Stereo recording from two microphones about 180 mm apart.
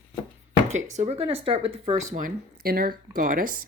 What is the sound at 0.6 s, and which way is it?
Speech, 40° right (ahead or behind).